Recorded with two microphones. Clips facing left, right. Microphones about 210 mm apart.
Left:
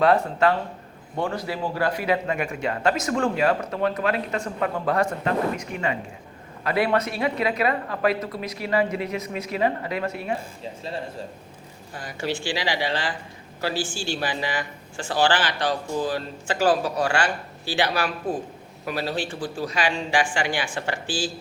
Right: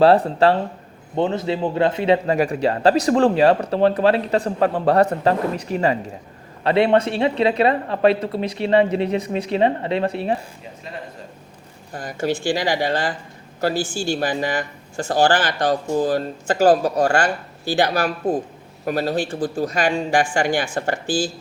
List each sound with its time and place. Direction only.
0.0 s a man's voice: 30° right (ahead or behind)
11.9 s speech: 45° right (ahead or behind)